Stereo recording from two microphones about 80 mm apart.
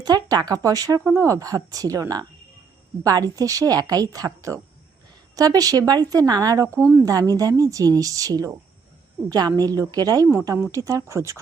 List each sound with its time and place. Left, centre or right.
0.0 s a woman's voice: right
6.7 s speech: right
7.0 s a woman's voice: right